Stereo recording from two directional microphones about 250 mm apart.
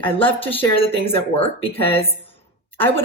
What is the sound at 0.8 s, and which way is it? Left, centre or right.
Speech, left.